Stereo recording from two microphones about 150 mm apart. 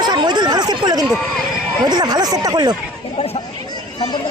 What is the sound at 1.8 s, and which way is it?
Speech, 25° right (ahead or behind).